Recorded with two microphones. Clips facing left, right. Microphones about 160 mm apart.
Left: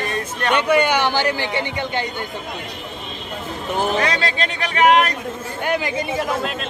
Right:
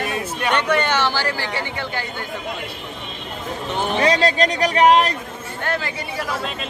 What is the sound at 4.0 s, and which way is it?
A man's voice, 35° right (ahead or behind).